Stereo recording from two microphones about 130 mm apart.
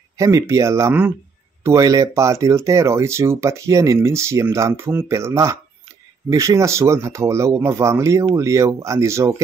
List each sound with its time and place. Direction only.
0.2 s speech: 25° right (ahead or behind)